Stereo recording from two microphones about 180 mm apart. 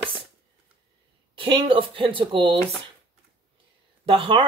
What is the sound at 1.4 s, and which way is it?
Speech, 30° right (ahead or behind).